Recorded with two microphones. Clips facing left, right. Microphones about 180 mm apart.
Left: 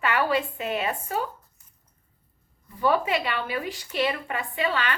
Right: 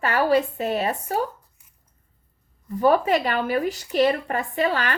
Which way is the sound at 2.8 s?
40° right (ahead or behind).